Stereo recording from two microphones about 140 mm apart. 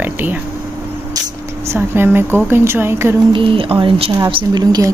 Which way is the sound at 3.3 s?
40° right (ahead or behind).